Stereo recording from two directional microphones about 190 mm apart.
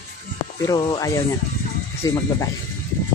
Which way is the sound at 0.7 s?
20° left (ahead or behind).